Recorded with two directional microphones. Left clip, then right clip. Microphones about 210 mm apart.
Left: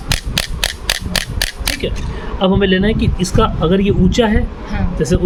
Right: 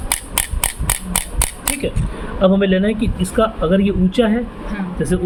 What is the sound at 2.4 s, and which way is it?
Speech, 50° left (ahead or behind).